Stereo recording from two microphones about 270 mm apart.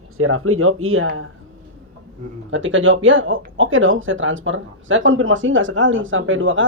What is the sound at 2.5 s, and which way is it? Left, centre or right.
Speech, right.